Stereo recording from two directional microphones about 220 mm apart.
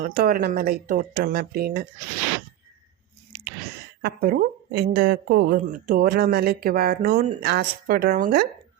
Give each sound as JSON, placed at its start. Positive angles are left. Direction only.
{"t": 0.0, "sound": "speech", "side_deg": -45}
{"t": 4.0, "sound": "speech", "side_deg": -40}